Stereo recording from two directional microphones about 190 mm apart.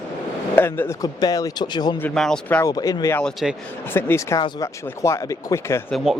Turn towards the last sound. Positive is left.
turn(degrees=0)  # may be behind; listen again after turning